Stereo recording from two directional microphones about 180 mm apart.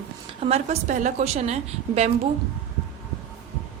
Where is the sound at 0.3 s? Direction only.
35° right (ahead or behind).